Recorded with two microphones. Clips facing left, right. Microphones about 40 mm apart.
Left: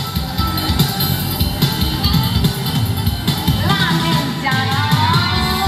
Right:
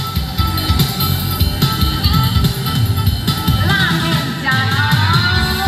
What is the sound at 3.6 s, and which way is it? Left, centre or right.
Music, right.